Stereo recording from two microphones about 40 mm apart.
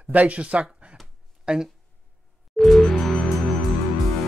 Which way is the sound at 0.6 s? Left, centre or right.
Right.